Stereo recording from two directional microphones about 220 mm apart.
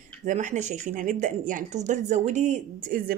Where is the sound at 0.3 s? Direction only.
35° right (ahead or behind).